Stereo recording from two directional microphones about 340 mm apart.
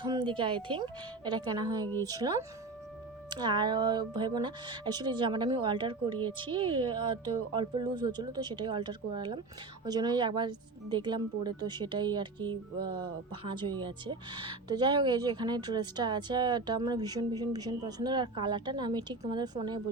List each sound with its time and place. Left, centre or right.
0.0 s a woman's voice: centre